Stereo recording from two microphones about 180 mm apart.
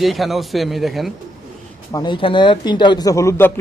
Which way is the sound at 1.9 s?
25° left (ahead or behind).